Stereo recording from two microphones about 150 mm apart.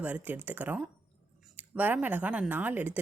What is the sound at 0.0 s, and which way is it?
Speech, 10° right (ahead or behind).